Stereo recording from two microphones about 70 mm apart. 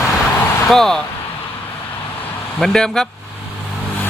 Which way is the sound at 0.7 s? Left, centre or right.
Centre.